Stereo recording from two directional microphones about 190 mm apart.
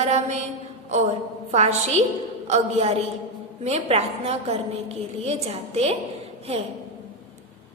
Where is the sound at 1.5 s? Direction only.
35° right (ahead or behind).